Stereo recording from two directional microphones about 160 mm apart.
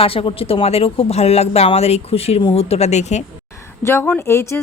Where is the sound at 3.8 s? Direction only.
15° left (ahead or behind).